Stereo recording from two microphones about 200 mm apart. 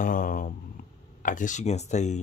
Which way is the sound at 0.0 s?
45° left (ahead or behind).